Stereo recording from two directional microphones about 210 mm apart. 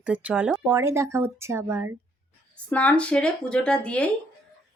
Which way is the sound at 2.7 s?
5° left (ahead or behind).